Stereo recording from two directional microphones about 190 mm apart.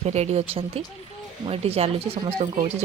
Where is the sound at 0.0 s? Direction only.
35° right (ahead or behind).